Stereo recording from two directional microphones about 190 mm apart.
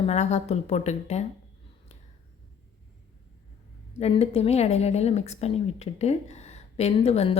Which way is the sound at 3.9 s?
35° left (ahead or behind).